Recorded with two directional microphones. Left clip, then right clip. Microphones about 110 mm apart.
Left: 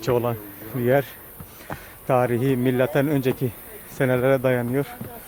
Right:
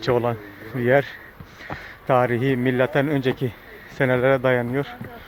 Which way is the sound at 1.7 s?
90° right.